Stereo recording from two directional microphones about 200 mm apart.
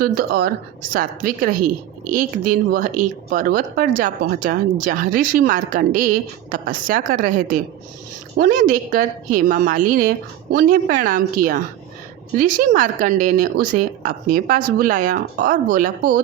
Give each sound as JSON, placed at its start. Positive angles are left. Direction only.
{"t": 0.0, "sound": "speech", "side_deg": -50}